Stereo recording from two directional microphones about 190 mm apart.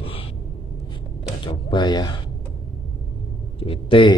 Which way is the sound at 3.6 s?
30° left (ahead or behind).